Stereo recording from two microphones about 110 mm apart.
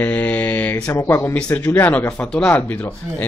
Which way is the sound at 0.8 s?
20° left (ahead or behind).